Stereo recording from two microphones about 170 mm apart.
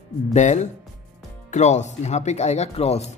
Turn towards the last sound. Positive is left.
turn(degrees=40)  # may be behind; listen again after turning